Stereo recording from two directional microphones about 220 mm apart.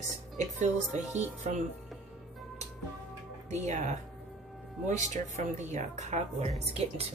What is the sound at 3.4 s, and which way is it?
Speech, 30° right (ahead or behind).